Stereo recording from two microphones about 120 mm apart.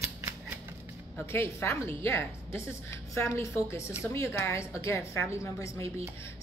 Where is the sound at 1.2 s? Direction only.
20° left (ahead or behind).